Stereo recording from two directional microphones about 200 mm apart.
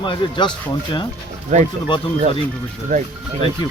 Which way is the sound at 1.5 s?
40° right (ahead or behind).